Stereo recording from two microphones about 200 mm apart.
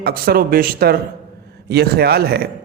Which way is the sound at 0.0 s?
50° right (ahead or behind).